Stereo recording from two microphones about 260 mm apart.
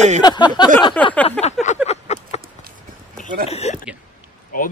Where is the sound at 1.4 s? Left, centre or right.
Left.